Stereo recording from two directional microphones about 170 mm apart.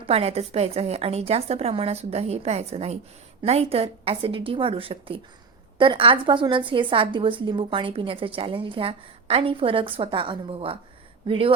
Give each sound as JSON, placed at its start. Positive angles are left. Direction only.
{"t": 0.1, "sound": "a woman's voice", "side_deg": -35}